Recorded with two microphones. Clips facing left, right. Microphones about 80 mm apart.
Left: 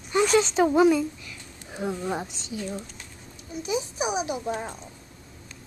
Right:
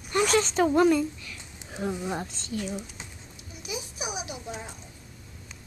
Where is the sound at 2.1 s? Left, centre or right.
Centre.